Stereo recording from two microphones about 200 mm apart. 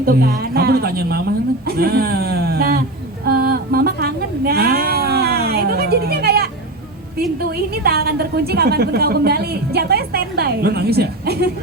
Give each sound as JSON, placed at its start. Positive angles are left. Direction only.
{"t": 0.0, "sound": "a woman's voice", "side_deg": -50}
{"t": 7.5, "sound": "a woman's voice", "side_deg": -50}